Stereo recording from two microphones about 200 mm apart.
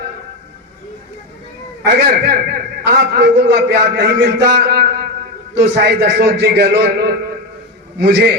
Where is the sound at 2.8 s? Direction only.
55° right (ahead or behind).